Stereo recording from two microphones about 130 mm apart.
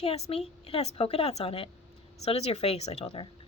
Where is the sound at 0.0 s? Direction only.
50° left (ahead or behind).